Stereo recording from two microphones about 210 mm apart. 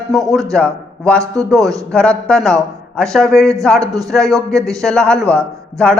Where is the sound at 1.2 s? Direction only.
15° right (ahead or behind).